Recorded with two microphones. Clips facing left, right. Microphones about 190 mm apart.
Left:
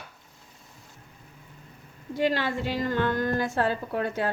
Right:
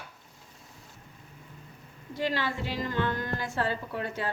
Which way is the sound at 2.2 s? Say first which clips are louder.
Left 5 dB; 50° left (ahead or behind).